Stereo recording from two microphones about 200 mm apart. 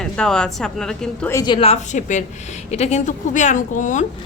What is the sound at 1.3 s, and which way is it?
A woman's voice, 20° left (ahead or behind).